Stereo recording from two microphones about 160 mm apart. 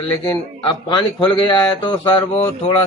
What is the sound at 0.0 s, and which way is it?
Speech, 30° left (ahead or behind).